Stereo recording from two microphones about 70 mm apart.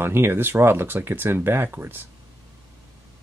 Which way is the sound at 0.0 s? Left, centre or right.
Right.